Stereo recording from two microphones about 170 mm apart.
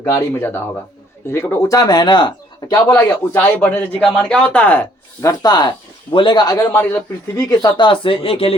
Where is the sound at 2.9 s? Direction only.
10° left (ahead or behind).